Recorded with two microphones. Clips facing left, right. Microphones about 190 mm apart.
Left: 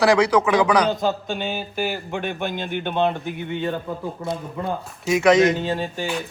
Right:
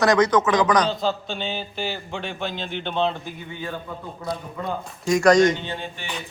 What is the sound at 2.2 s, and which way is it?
Speech, 55° left (ahead or behind).